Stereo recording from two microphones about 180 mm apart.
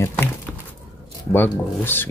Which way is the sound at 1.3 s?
10° left (ahead or behind).